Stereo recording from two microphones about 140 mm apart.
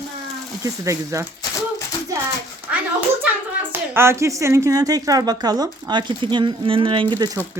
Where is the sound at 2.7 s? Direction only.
15° right (ahead or behind).